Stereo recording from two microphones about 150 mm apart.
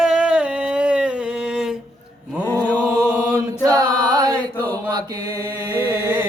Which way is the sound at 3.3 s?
25° right (ahead or behind).